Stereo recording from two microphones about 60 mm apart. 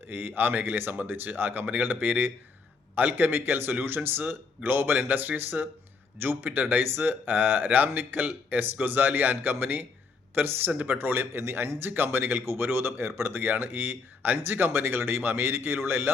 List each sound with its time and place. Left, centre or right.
0.1 s speech: right